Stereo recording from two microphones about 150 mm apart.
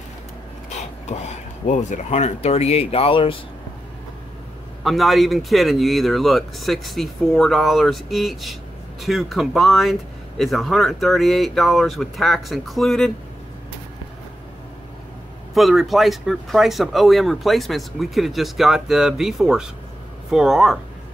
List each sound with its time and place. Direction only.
0.7 s speech: 50° left (ahead or behind)
4.8 s speech: centre (ahead or behind)
15.5 s speech: centre (ahead or behind)